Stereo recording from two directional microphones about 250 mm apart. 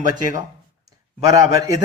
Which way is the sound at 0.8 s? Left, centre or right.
Centre.